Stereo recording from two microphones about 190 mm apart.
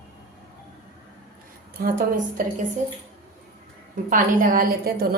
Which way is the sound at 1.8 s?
50° right (ahead or behind).